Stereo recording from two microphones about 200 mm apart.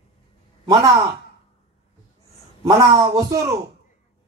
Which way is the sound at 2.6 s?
20° right (ahead or behind).